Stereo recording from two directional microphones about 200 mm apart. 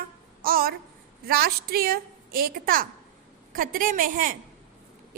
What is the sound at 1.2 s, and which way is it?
A woman's voice, 50° right (ahead or behind).